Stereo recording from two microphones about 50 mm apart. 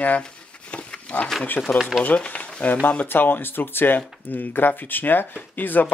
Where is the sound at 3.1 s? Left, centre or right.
Left.